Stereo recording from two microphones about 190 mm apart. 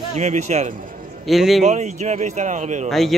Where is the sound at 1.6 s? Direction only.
35° right (ahead or behind).